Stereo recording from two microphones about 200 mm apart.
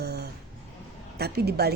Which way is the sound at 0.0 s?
55° right (ahead or behind).